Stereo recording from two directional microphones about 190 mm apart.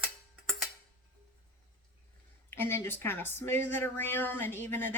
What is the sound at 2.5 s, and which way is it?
Speech, 10° left (ahead or behind).